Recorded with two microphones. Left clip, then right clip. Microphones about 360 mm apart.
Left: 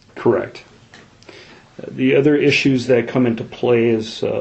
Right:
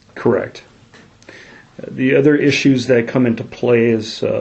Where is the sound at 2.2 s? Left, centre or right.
Right.